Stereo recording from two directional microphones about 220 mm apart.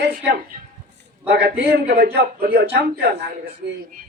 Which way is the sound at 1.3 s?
50° right (ahead or behind).